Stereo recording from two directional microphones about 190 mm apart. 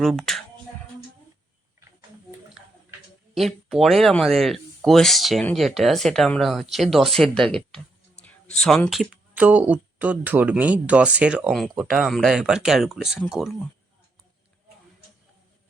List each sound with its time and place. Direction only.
0.0 s speech: centre (ahead or behind)
3.3 s speech: centre (ahead or behind)